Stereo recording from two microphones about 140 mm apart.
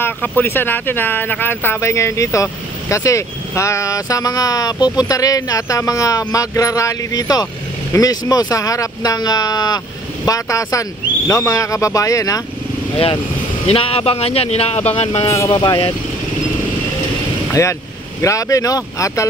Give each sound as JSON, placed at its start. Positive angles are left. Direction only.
{"t": 0.4, "sound": "speech", "side_deg": 15}
{"t": 12.9, "sound": "speech", "side_deg": 40}
{"t": 15.2, "sound": "speech", "side_deg": 20}
{"t": 15.5, "sound": "speech", "side_deg": 35}
{"t": 17.5, "sound": "speech", "side_deg": 20}